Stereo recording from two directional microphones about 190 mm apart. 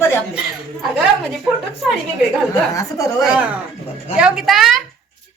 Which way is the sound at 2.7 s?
15° left (ahead or behind).